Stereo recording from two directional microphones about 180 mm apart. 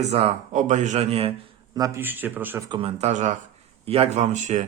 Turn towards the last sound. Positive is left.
turn(degrees=-40)  # may be behind; listen again after turning